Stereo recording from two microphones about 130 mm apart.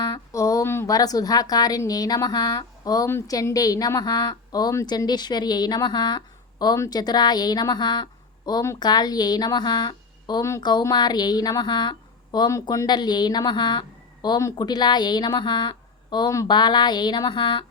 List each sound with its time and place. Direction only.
0.0 s speech: 30° left (ahead or behind)